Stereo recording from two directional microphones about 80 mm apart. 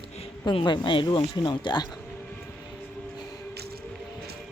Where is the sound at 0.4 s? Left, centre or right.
Left.